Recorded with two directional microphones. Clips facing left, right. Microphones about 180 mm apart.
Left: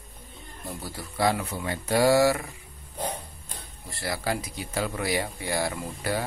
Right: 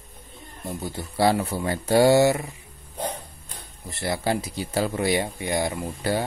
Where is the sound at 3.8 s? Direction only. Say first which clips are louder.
Right 4 dB; 20° right (ahead or behind).